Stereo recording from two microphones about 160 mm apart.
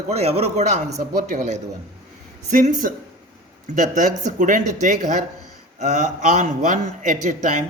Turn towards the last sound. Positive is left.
turn(degrees=-50)  # may be behind; listen again after turning